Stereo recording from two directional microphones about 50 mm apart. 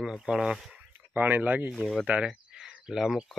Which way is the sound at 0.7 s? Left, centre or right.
Right.